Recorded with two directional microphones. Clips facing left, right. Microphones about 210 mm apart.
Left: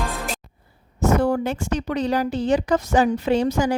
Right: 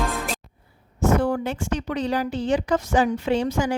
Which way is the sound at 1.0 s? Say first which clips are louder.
Left 2 dB; 40° left (ahead or behind).